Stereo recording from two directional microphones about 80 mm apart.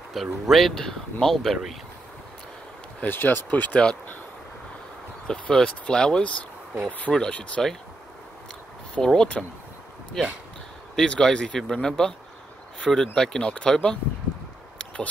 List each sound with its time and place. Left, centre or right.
0.1 s speech: centre
3.0 s speech: left
5.2 s speech: centre
8.9 s speech: centre